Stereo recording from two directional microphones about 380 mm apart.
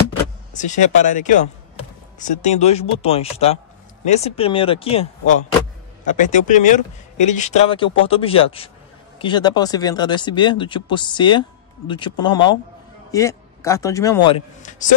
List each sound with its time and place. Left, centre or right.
0.6 s a man's voice: centre